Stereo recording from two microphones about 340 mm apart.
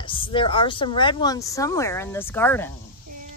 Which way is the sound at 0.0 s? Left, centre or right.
Centre.